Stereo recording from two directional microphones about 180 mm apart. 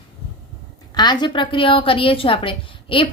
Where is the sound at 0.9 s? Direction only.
25° left (ahead or behind).